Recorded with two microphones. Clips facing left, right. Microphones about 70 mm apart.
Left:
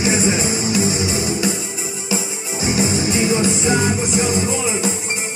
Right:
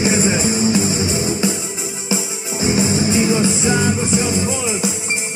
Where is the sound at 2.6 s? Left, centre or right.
Right.